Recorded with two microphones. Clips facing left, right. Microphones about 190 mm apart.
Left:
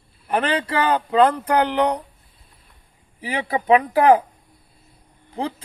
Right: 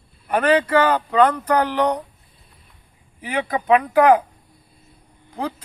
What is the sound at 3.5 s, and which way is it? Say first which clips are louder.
Speech: left 1 dB; 30° left (ahead or behind).